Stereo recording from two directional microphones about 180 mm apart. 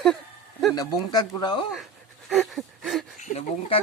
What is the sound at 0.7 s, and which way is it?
Speech, 20° left (ahead or behind).